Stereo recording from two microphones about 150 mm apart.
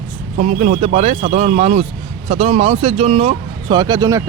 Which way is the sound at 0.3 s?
50° right (ahead or behind).